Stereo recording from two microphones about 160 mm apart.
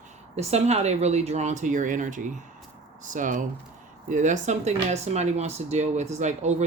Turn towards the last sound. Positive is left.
turn(degrees=-45)  # may be behind; listen again after turning